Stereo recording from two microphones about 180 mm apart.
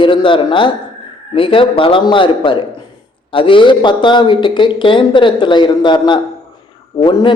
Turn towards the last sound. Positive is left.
turn(degrees=25)  # may be behind; listen again after turning